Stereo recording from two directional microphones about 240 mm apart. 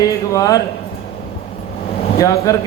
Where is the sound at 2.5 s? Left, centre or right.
Centre.